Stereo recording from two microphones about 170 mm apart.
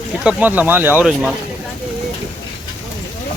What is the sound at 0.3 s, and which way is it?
Speech, 10° right (ahead or behind).